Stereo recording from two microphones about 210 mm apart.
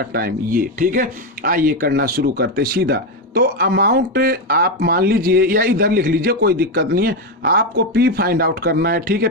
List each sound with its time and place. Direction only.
0.0 s speech: 45° right (ahead or behind)